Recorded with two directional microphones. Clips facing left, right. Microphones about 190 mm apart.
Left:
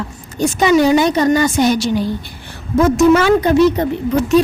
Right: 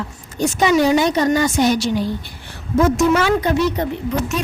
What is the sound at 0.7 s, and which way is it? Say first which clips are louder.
Speech: left 4 dB; 60° left (ahead or behind).